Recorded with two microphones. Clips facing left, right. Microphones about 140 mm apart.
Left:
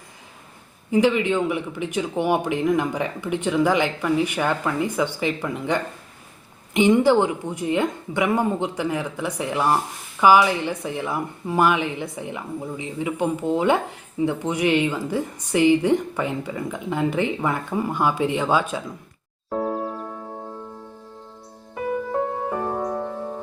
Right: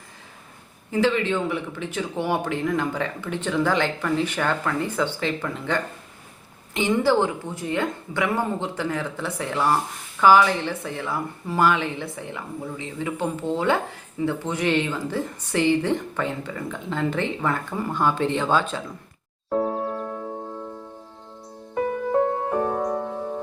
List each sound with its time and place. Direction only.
0.9 s speech: 15° left (ahead or behind)
19.5 s music: centre (ahead or behind)
22.1 s music: centre (ahead or behind)